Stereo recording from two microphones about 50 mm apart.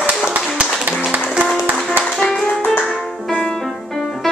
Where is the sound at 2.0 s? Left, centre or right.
Centre.